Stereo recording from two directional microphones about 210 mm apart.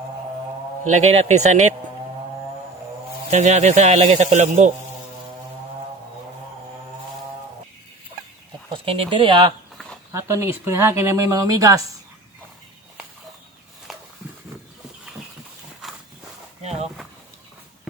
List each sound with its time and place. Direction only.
0.9 s a man's voice: 35° right (ahead or behind)
3.2 s a man's voice: 35° right (ahead or behind)
8.7 s speech: 25° right (ahead or behind)